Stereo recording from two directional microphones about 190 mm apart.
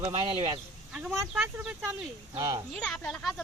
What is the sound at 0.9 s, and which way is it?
Speech, 5° right (ahead or behind).